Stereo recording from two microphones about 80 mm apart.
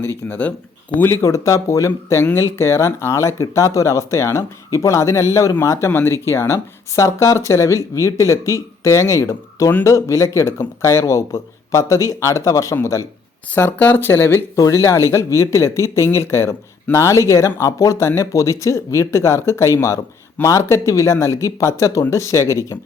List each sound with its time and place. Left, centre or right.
0.3 s speech: centre
1.2 s speech: left
13.5 s speech: left